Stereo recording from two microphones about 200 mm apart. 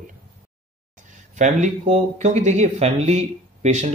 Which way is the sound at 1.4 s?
35° right (ahead or behind).